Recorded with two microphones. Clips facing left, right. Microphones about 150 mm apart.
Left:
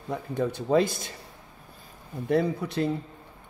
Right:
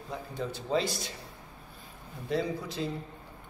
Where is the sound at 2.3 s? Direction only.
60° left (ahead or behind).